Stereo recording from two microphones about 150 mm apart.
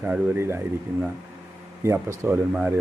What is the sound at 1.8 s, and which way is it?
Speech, 15° right (ahead or behind).